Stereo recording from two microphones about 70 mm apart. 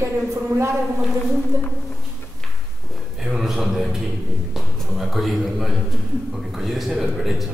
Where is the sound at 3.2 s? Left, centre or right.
Centre.